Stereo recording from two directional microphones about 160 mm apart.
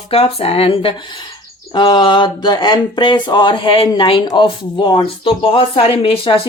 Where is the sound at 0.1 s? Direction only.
40° left (ahead or behind).